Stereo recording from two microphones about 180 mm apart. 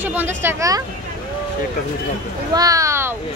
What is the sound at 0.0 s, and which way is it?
Speech, 10° right (ahead or behind).